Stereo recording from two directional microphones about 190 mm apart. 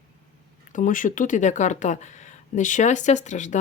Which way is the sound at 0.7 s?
45° left (ahead or behind).